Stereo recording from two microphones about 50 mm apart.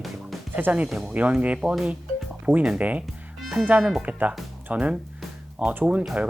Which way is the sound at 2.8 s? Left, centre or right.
Right.